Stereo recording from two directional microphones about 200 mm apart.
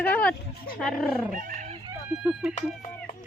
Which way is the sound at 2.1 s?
5° right (ahead or behind).